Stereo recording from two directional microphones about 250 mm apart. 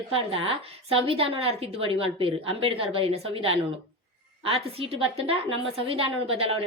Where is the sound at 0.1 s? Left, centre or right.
Right.